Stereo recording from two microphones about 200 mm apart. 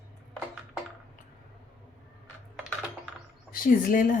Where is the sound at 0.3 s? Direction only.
Centre (ahead or behind).